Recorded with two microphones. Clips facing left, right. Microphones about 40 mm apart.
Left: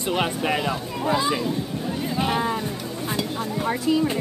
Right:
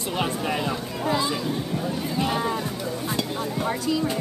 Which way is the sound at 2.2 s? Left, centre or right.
Centre.